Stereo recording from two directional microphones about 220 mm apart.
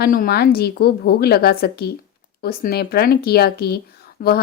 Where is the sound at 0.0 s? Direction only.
45° left (ahead or behind).